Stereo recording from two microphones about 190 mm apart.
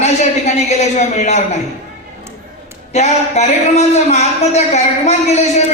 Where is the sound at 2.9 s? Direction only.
35° left (ahead or behind).